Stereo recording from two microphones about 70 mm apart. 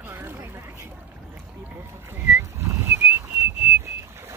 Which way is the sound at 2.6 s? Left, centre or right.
Right.